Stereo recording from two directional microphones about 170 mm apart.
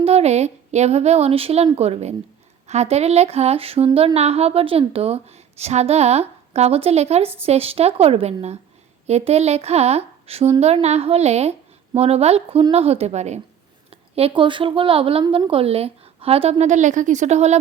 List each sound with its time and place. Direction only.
0.0 s speech: 40° right (ahead or behind)